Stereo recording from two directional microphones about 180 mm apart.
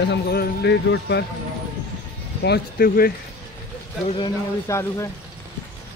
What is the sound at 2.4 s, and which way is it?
Speech, 60° left (ahead or behind).